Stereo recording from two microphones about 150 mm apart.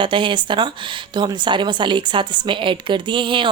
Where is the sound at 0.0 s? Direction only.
35° right (ahead or behind).